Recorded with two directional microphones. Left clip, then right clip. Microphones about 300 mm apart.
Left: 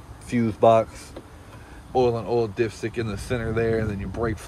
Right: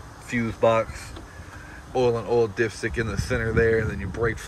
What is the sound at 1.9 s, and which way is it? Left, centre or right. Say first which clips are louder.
Speech: even; centre.